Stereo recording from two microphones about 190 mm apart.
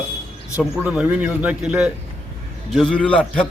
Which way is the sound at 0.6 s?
5° right (ahead or behind).